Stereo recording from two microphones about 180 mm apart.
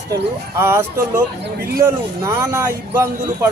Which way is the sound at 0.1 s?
15° right (ahead or behind).